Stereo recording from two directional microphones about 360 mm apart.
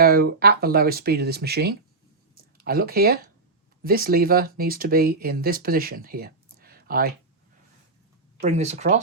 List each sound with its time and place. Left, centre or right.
0.0 s speech: right
8.4 s speech: centre